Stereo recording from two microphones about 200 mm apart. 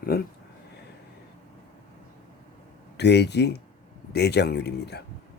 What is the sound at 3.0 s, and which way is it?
Speech, 55° left (ahead or behind).